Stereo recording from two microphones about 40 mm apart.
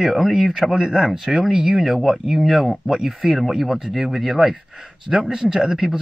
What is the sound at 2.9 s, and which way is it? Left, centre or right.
A man's voice, centre.